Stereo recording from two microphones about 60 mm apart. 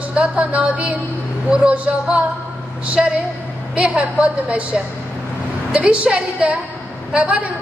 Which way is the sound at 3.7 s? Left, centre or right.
Right.